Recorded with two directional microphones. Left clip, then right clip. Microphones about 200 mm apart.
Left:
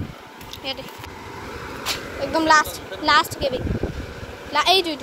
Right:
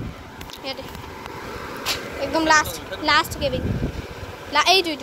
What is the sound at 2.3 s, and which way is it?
A woman's voice, 10° left (ahead or behind).